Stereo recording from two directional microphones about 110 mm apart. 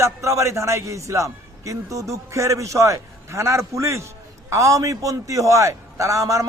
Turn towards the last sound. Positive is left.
turn(degrees=-30)  # may be behind; listen again after turning